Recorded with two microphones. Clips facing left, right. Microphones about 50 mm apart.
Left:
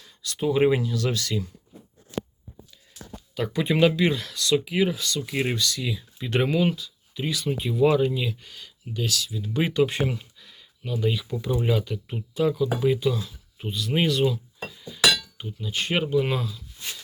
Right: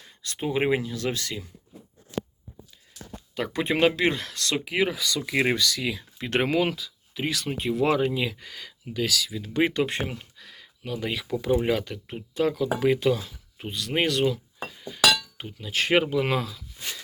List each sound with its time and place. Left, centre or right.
0.0 s speech: right
3.3 s speech: right
6.0 s speech: right
7.4 s speech: right
8.1 s speech: right
9.0 s speech: right
9.5 s speech: right
10.3 s a sound: right
11.7 s speech: right
12.4 s speech: right
12.8 s speech: right
14.1 s speech: right